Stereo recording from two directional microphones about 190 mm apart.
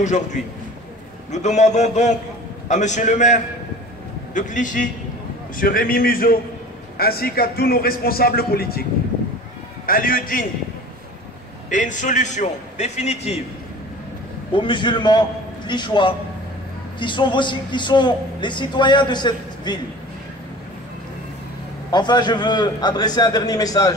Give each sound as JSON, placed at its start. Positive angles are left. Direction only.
{"t": 0.0, "sound": "a man's voice", "side_deg": 40}
{"t": 9.8, "sound": "a man's voice", "side_deg": 50}
{"t": 11.7, "sound": "a man's voice", "side_deg": 40}
{"t": 14.5, "sound": "a man's voice", "side_deg": 25}
{"t": 21.9, "sound": "a man's voice", "side_deg": 20}